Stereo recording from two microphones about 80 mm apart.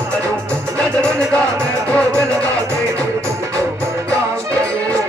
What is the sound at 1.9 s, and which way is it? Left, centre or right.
Music, centre.